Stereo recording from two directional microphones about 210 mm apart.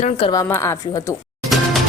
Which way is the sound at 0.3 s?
15° left (ahead or behind).